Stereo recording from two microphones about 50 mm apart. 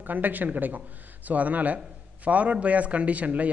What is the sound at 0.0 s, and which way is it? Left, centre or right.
A man's voice, right.